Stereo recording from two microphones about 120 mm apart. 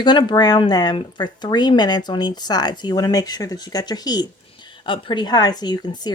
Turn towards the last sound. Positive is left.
turn(degrees=35)  # may be behind; listen again after turning